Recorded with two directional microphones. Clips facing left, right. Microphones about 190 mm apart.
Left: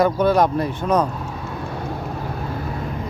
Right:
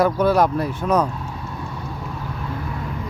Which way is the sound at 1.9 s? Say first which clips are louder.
Left 3 dB; 50° left (ahead or behind).